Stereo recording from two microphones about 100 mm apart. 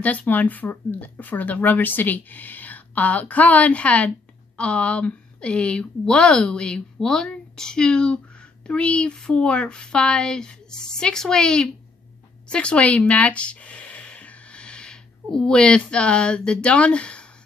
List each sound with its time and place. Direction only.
0.0 s a woman's voice: 15° left (ahead or behind)